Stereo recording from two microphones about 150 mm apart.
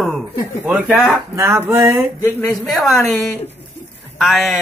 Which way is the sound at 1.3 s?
20° right (ahead or behind).